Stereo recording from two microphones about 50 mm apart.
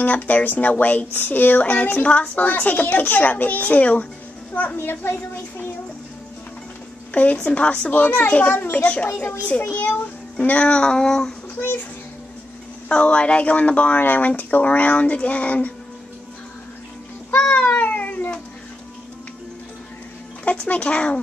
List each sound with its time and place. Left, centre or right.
0.0 s speech: left
4.7 s a woman's voice: left
7.1 s speech: left; by 11.3 s centre
12.8 s speech: left
17.5 s meow: left
20.4 s speech: left